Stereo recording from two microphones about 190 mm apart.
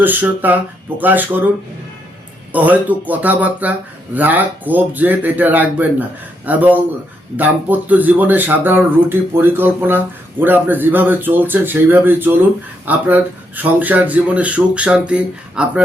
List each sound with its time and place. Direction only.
0.0 s speech: 10° right (ahead or behind)
2.5 s speech: 10° right (ahead or behind)